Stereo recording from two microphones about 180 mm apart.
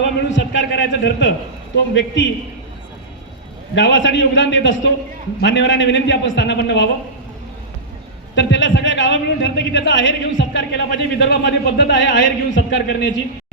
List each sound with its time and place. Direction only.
0.0 s a man's voice: 90° left
3.8 s speech: 90° left
8.4 s speech: 85° left
12.7 s a man's voice: 70° left (ahead or behind)